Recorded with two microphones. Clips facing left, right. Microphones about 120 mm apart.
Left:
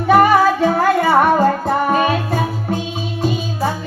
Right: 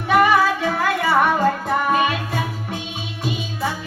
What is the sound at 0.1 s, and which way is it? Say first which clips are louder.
Music: left 4 dB; 40° left (ahead or behind).